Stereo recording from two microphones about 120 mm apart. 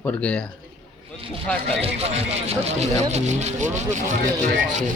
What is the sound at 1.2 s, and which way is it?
A man's voice, 50° right (ahead or behind).